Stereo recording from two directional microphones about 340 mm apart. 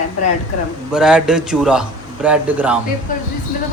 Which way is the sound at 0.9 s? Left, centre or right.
Centre.